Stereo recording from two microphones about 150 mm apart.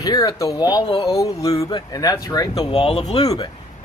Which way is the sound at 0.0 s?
25° left (ahead or behind).